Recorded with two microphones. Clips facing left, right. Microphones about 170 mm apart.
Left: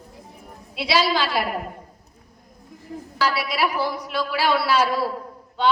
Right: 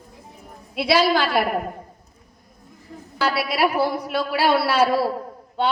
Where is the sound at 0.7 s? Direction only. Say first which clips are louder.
Right 3 dB; 55° right (ahead or behind).